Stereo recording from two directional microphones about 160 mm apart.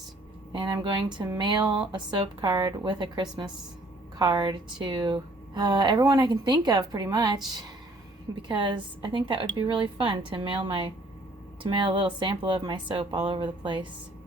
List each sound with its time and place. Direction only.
0.5 s a woman's voice: 30° right (ahead or behind)